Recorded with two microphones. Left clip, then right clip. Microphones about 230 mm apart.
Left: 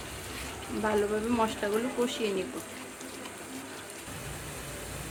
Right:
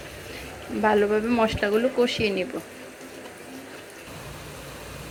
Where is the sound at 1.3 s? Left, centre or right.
Centre.